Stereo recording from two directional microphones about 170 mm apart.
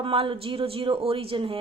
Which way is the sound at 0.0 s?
30° right (ahead or behind).